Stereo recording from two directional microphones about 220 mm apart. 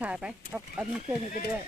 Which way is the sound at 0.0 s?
5° right (ahead or behind).